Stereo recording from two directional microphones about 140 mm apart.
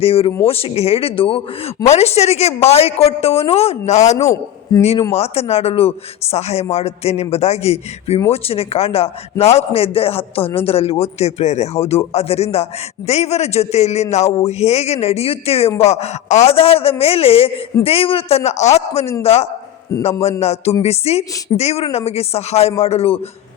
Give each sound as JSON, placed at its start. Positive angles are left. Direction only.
{"t": 0.0, "sound": "a man's voice", "side_deg": 45}
{"t": 4.7, "sound": "speech", "side_deg": 25}
{"t": 5.1, "sound": "a man's voice", "side_deg": 45}